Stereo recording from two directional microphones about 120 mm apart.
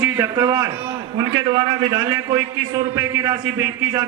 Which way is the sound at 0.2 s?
30° right (ahead or behind).